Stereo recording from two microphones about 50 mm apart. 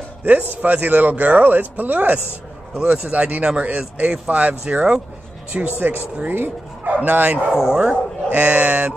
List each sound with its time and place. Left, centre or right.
0.2 s speech: right
2.7 s speech: right
7.5 s speech: centre
8.3 s speech: right